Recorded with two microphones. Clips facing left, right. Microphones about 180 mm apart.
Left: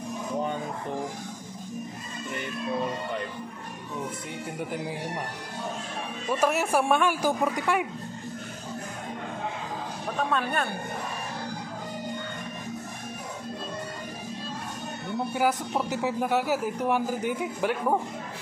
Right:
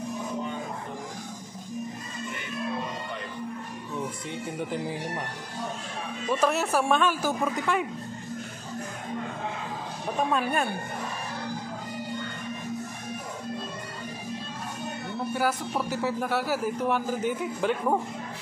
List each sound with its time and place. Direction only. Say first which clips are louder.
6.4 s speech: left 1 dB; 10° left (ahead or behind)
10.3 s speech: right 1 dB; 10° right (ahead or behind)
15.3 s speech: left 2 dB; 15° left (ahead or behind)